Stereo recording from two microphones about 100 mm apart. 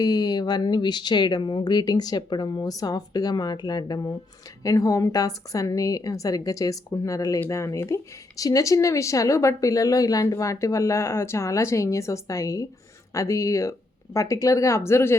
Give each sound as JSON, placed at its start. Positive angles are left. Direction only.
{"t": 0.0, "sound": "speech", "side_deg": 40}